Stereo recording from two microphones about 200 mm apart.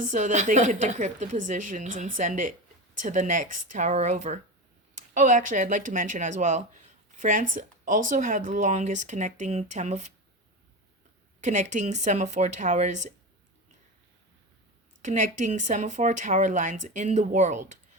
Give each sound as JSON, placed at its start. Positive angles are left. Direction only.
{"t": 0.0, "sound": "speech", "side_deg": -40}
{"t": 11.3, "sound": "speech", "side_deg": -35}
{"t": 15.0, "sound": "speech", "side_deg": -40}